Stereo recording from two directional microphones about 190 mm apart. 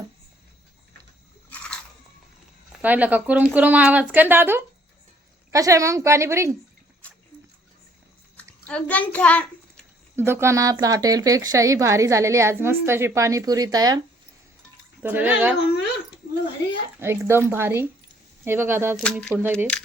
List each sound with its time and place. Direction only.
1.5 s crunch: 5° left (ahead or behind)
2.8 s speech: 10° right (ahead or behind)
8.4 s a sound: 5° left (ahead or behind)
10.2 s speech: 10° right (ahead or behind)
15.0 s speech: 10° right (ahead or behind)
16.2 s a sound: 50° left (ahead or behind)
17.0 s speech: 15° right (ahead or behind)
18.9 s speech: 5° left (ahead or behind)
19.3 s speech: 10° right (ahead or behind)